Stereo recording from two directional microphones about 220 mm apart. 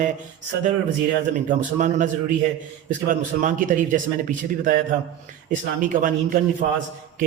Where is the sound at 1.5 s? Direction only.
35° right (ahead or behind).